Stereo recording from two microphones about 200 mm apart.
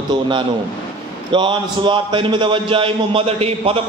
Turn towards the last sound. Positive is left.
turn(degrees=-30)  # may be behind; listen again after turning